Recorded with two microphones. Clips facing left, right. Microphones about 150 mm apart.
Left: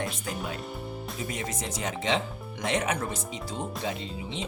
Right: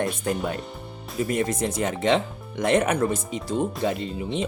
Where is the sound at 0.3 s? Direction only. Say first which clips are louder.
Right 7 dB; 55° right (ahead or behind).